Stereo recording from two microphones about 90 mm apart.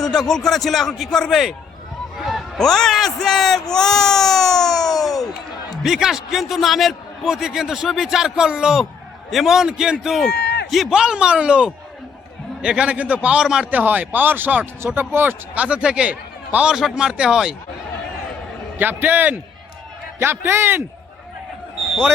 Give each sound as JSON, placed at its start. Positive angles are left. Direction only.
{"t": 0.0, "sound": "a man's voice", "side_deg": 5}
{"t": 4.9, "sound": "a sound", "side_deg": 45}
{"t": 5.8, "sound": "a man's voice", "side_deg": -5}
{"t": 18.8, "sound": "a man's voice", "side_deg": -20}